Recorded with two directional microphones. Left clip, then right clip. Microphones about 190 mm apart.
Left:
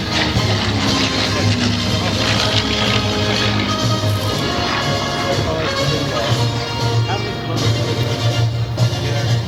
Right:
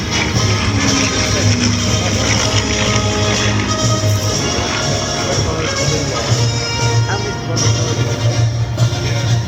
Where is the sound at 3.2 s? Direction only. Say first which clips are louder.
Right 1 dB; 20° right (ahead or behind).